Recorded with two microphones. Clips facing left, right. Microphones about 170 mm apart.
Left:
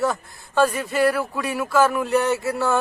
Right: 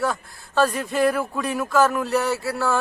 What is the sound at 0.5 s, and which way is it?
Speech, 10° left (ahead or behind).